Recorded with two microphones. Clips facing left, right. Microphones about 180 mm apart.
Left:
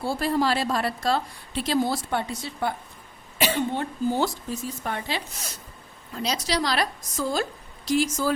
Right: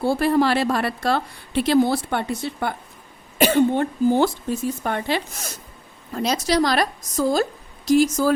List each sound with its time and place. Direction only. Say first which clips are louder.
0.0 s a woman's voice: right 6 dB; 60° right (ahead or behind)
3.3 s a woman's voice: right 8 dB; 50° right (ahead or behind)